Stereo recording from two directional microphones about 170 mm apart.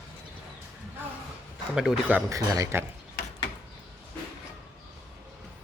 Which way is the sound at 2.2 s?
20° right (ahead or behind).